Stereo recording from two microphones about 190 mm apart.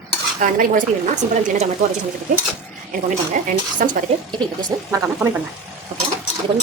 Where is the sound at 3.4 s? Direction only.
45° right (ahead or behind).